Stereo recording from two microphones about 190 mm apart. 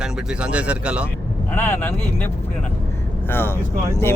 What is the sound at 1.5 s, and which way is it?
Speech, 10° left (ahead or behind).